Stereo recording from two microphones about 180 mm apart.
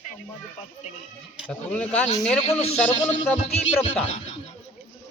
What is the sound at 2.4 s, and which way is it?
Speech, 35° left (ahead or behind).